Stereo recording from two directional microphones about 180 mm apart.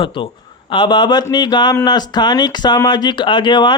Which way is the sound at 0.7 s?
25° left (ahead or behind).